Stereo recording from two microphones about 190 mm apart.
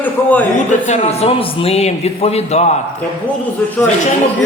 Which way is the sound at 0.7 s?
40° left (ahead or behind).